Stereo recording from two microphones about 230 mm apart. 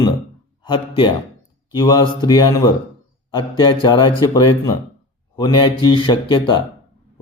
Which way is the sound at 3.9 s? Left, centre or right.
Centre.